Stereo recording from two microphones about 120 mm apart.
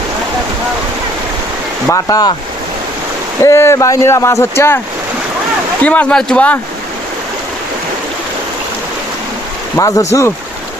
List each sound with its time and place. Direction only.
1.9 s speech: 30° left (ahead or behind)
3.4 s speech: 20° left (ahead or behind)
5.8 s speech: 10° left (ahead or behind)
9.7 s speech: 25° left (ahead or behind)